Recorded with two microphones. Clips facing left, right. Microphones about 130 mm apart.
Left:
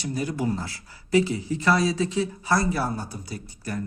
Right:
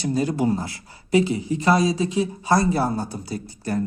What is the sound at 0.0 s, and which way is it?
Speech, 30° right (ahead or behind).